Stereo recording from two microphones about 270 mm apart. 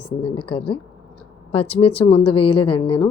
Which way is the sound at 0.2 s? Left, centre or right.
Centre.